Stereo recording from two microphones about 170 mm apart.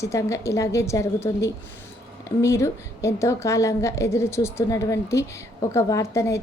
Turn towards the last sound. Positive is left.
turn(degrees=15)  # may be behind; listen again after turning